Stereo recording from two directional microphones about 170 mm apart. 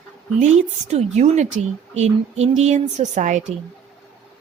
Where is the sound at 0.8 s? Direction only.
40° right (ahead or behind).